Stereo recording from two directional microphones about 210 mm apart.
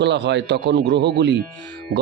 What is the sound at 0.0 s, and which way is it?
A man's voice, 55° right (ahead or behind).